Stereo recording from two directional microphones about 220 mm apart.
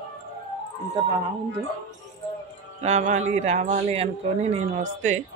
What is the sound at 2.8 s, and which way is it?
Speech, 30° right (ahead or behind).